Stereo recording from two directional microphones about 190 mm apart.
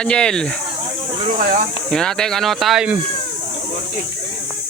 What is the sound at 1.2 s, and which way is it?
Speech, 40° right (ahead or behind).